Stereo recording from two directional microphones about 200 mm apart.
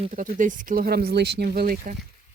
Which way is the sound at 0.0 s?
40° right (ahead or behind).